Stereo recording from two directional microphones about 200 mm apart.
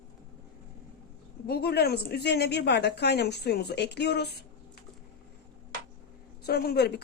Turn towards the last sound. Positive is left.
turn(degrees=50)  # may be behind; listen again after turning